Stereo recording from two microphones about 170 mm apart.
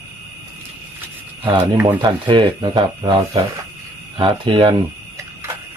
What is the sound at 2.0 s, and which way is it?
Speech, 25° right (ahead or behind).